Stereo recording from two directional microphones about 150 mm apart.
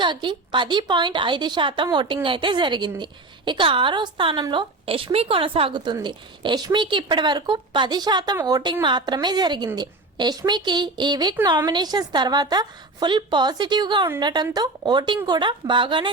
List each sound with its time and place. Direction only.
0.0 s a woman's voice: 30° right (ahead or behind)